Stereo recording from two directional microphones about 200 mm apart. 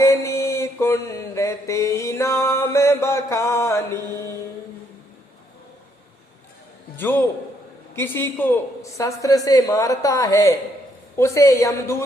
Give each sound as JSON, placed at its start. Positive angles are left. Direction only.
{"t": 0.0, "sound": "mantra", "side_deg": 15}
{"t": 6.9, "sound": "a man's voice", "side_deg": 10}